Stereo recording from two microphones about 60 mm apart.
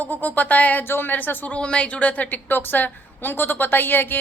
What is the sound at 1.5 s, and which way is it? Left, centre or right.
A woman's voice, centre.